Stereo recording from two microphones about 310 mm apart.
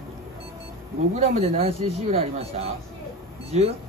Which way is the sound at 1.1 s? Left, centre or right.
Right.